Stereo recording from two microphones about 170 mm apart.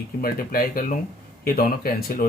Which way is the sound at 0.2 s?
60° left (ahead or behind).